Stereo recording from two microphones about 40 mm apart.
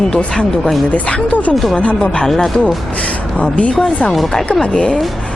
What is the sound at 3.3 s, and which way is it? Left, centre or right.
Speech, left.